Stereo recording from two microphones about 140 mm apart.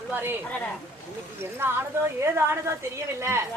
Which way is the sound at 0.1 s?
15° right (ahead or behind).